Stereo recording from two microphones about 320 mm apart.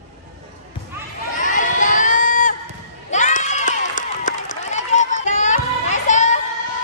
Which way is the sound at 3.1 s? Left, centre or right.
Left.